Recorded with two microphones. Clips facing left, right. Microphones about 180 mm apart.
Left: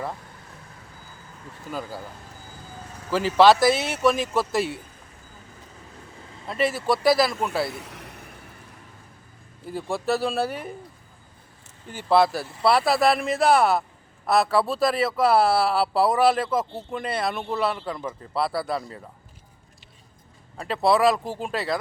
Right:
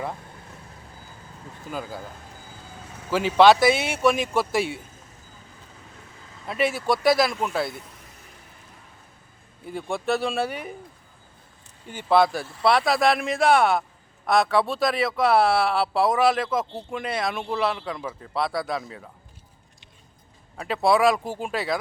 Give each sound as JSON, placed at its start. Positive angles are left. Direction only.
{"t": 3.1, "sound": "speech", "side_deg": 0}
{"t": 6.5, "sound": "speech", "side_deg": 0}
{"t": 7.7, "sound": "vehicle", "side_deg": 75}
{"t": 9.7, "sound": "speech", "side_deg": 0}
{"t": 11.9, "sound": "speech", "side_deg": 5}
{"t": 20.6, "sound": "speech", "side_deg": 0}